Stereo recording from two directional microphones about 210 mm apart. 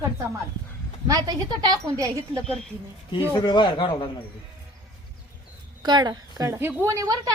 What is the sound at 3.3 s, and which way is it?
Speech, 20° left (ahead or behind).